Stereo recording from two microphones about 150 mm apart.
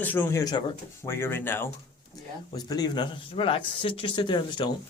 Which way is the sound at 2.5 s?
25° left (ahead or behind).